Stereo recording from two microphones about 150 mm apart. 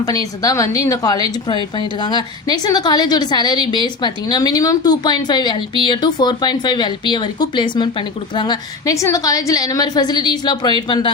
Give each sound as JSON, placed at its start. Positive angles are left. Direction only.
{"t": 0.0, "sound": "speech", "side_deg": 25}